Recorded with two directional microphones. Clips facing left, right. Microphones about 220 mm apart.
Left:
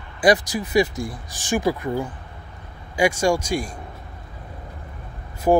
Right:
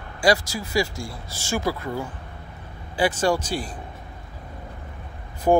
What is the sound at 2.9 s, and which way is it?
Speech, 10° left (ahead or behind).